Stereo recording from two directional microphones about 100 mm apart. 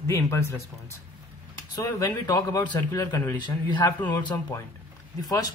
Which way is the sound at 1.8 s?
35° left (ahead or behind).